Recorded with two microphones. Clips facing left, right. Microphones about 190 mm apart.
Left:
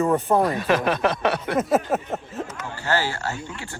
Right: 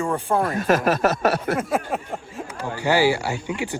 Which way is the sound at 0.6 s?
45° right (ahead or behind).